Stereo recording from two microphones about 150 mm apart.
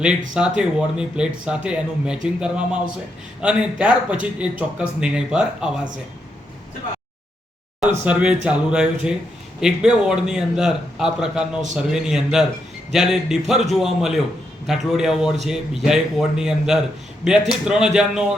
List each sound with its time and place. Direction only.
0.0 s speech: 5° right (ahead or behind)
8.0 s speech: 10° right (ahead or behind)